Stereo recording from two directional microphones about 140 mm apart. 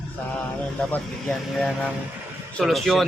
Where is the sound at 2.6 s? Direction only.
Centre (ahead or behind).